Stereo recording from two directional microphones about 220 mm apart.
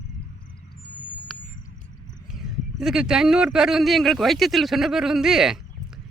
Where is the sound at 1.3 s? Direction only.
Centre (ahead or behind).